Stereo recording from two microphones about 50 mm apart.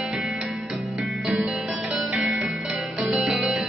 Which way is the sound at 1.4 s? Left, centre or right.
Centre.